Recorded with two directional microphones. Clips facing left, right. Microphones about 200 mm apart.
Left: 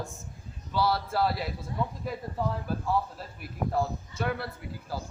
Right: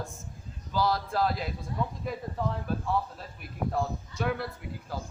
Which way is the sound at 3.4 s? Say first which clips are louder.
Left 1 dB; centre (ahead or behind).